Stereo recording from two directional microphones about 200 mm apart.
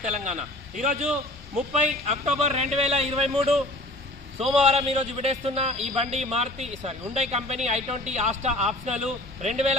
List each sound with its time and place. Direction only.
0.0 s a man's voice: 35° right (ahead or behind)
2.0 s a man's voice: 35° right (ahead or behind)